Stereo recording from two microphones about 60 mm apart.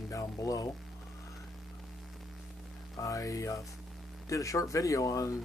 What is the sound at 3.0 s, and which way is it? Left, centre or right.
Speech, left.